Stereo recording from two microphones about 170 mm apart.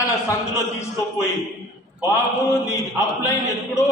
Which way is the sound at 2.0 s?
15° left (ahead or behind).